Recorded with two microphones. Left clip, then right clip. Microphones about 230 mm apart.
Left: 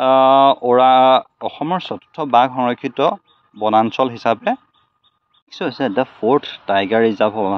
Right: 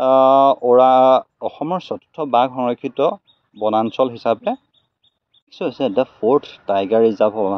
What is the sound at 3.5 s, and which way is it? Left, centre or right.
Speech, left.